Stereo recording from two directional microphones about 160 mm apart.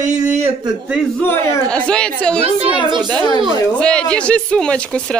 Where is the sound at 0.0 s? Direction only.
45° right (ahead or behind).